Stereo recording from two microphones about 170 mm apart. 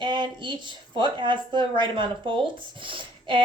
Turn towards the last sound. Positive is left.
turn(degrees=-30)  # may be behind; listen again after turning